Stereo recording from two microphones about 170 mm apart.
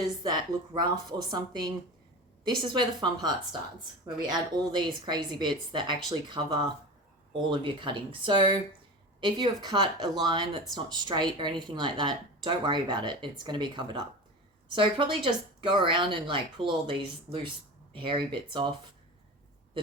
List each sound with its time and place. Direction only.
0.2 s speech: 25° right (ahead or behind)